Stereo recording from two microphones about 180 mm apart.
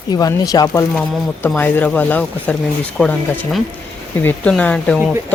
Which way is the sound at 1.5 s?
10° left (ahead or behind).